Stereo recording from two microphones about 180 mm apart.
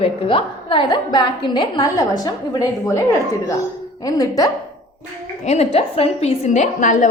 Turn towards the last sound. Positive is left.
turn(degrees=45)  # may be behind; listen again after turning